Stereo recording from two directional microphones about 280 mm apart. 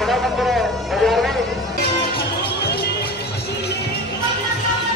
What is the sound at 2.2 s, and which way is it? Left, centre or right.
Music, left.